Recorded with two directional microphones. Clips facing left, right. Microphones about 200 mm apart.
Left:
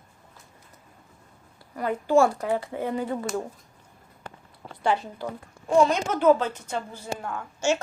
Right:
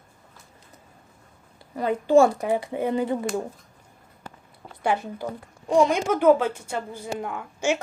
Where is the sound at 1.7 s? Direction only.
25° right (ahead or behind).